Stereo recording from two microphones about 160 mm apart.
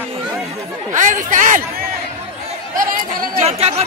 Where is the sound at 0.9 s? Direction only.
50° right (ahead or behind).